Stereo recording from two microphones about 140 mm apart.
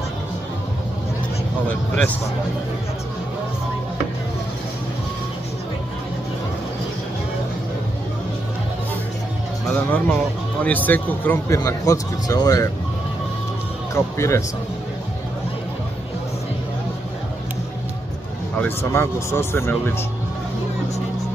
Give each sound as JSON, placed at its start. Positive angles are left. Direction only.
{"t": 9.7, "sound": "speech", "side_deg": 15}
{"t": 13.9, "sound": "speech", "side_deg": 20}
{"t": 18.6, "sound": "speech", "side_deg": 20}